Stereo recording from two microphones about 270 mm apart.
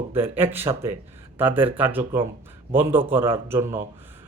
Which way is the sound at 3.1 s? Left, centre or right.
Centre.